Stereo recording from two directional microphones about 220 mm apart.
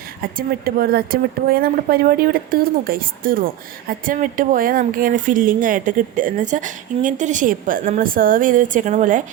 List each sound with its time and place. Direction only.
0.2 s a woman's voice: 40° right (ahead or behind)